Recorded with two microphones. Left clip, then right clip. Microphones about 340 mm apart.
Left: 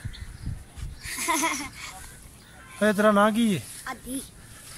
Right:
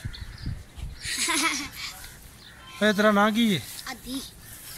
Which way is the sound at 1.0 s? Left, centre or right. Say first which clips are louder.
Right 1 dB; centre.